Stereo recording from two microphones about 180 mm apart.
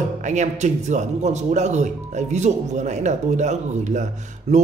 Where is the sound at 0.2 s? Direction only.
40° right (ahead or behind).